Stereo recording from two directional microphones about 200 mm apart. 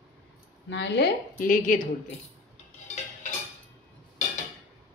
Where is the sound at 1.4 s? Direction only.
45° left (ahead or behind).